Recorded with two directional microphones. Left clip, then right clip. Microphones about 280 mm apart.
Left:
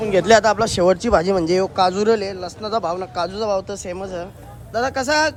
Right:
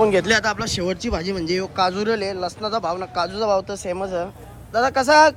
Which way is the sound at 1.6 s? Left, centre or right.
Centre.